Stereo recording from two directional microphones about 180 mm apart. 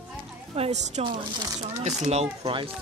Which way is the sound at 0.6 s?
40° right (ahead or behind).